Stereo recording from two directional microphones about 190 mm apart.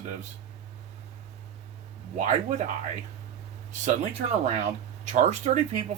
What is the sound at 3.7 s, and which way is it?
Speech, 40° right (ahead or behind).